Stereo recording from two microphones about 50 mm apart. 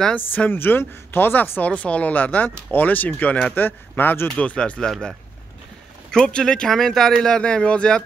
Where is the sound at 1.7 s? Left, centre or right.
Left.